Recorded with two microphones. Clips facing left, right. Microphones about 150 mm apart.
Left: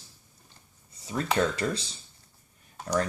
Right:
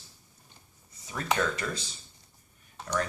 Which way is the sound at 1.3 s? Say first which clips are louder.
Left 4 dB; 30° left (ahead or behind).